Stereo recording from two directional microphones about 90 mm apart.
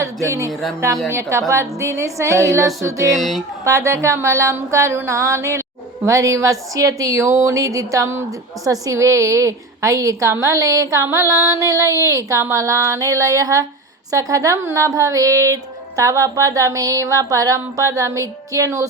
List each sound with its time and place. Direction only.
0.0 s speech: 35° right (ahead or behind)
3.2 s speech: centre (ahead or behind)
3.6 s speech: 35° right (ahead or behind)